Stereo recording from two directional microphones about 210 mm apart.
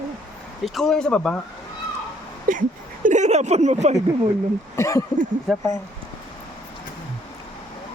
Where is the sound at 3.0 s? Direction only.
35° right (ahead or behind).